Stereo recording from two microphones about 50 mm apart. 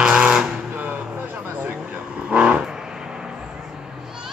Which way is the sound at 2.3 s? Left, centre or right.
Right.